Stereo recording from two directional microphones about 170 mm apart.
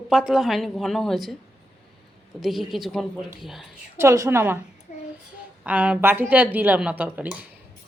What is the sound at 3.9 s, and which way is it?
Speech, 15° right (ahead or behind).